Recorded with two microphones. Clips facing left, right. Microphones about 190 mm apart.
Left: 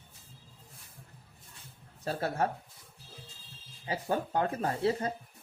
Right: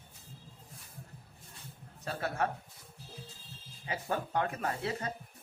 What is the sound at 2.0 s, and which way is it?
Speech, 35° left (ahead or behind).